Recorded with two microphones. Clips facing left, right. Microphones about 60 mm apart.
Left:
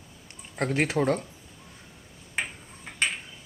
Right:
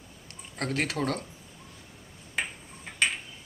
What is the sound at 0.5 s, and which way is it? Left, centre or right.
Speech, centre.